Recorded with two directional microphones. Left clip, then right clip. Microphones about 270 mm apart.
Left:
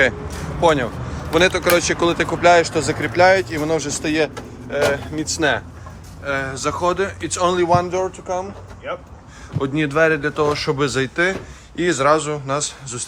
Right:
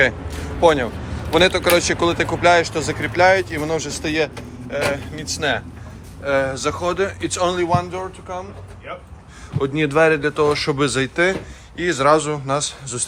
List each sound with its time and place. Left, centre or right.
0.6 s speech: centre
6.2 s speech: centre; by 8.9 s left
9.6 s speech: centre